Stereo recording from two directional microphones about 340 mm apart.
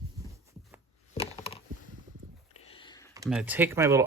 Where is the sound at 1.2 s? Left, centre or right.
Centre.